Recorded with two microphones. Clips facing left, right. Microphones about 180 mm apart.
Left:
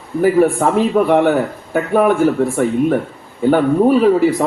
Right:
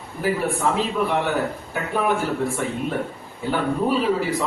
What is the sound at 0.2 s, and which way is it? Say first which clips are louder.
A man's voice: left 10 dB; 50° left (ahead or behind).